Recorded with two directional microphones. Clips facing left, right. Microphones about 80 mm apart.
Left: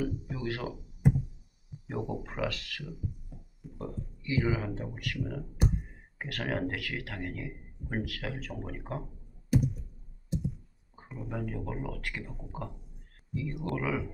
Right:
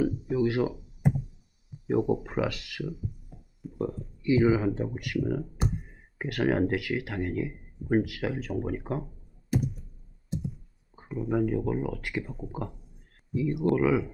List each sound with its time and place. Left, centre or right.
0.0 s speech: centre
1.9 s speech: centre
11.1 s speech: centre